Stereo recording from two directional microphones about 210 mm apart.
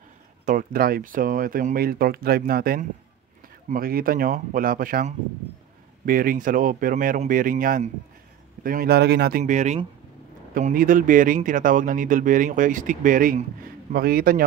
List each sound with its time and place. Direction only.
0.5 s speech: 40° right (ahead or behind)
9.4 s speech: 35° right (ahead or behind)